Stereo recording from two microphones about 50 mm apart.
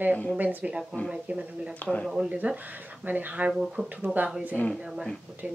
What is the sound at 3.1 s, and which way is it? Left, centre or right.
Speech, right.